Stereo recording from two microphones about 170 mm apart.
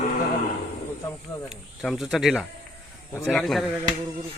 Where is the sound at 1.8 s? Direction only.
Centre (ahead or behind).